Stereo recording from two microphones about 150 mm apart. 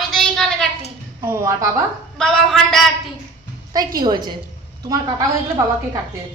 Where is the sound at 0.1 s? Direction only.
5° left (ahead or behind).